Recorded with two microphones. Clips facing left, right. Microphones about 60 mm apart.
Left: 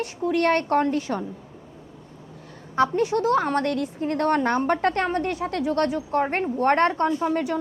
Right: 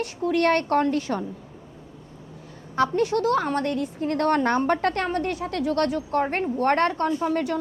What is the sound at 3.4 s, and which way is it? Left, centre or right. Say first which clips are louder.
Speech: left 1 dB; left.